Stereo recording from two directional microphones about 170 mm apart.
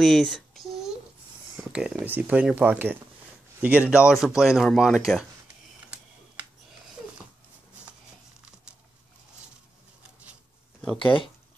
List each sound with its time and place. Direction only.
0.0 s a sound: centre (ahead or behind)
1.6 s speech: 5° right (ahead or behind)
11.0 s speech: 30° left (ahead or behind)